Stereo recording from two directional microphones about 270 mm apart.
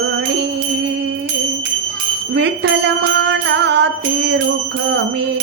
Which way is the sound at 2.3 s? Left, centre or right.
Right.